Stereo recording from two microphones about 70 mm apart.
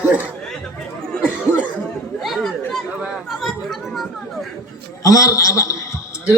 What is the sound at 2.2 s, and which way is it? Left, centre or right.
Chatter, centre.